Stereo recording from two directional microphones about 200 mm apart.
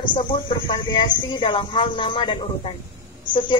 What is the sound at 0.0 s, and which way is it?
Speech, 25° left (ahead or behind).